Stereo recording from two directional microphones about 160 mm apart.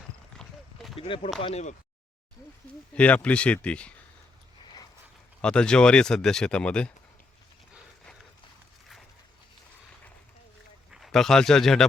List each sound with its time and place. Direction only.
0.3 s clip-clop: centre (ahead or behind)
0.9 s speech: 35° left (ahead or behind)
2.9 s speech: 10° left (ahead or behind)
4.6 s a sound: 25° left (ahead or behind)
5.4 s speech: 5° left (ahead or behind)
10.9 s speech: centre (ahead or behind)